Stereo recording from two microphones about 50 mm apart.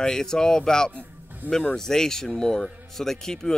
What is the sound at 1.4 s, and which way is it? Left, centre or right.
Speech, right.